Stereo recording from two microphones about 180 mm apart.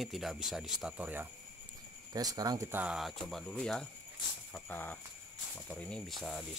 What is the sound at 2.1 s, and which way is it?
Speech, 20° right (ahead or behind).